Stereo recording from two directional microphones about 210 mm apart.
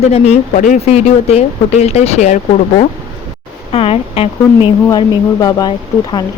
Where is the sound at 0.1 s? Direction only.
35° left (ahead or behind).